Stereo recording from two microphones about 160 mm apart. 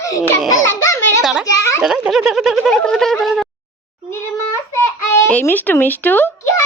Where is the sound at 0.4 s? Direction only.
20° left (ahead or behind).